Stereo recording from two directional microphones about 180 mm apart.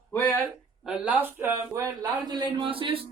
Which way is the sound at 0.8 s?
5° right (ahead or behind).